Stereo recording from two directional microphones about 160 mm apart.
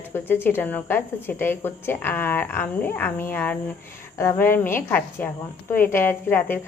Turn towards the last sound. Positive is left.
turn(degrees=10)  # may be behind; listen again after turning